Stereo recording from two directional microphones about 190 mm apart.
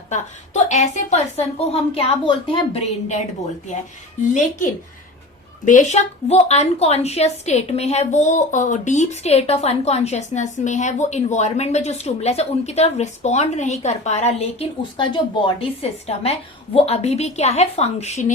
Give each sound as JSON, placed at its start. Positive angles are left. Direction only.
{"t": 0.1, "sound": "a woman's voice", "side_deg": 40}
{"t": 4.2, "sound": "a woman's voice", "side_deg": 40}